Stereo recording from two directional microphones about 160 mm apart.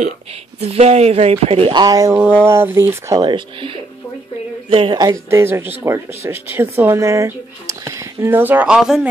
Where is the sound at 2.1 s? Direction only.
10° right (ahead or behind).